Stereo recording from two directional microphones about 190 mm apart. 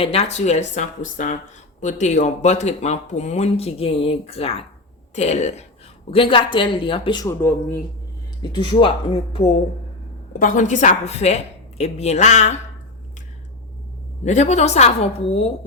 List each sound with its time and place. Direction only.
0.0 s a woman's voice: 35° left (ahead or behind); by 7.8 s 15° left (ahead or behind)
8.4 s a woman's voice: 25° left (ahead or behind)
10.3 s speech: 45° left (ahead or behind)
14.3 s speech: 40° left (ahead or behind)